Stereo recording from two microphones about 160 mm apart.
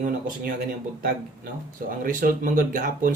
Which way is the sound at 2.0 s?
60° right (ahead or behind).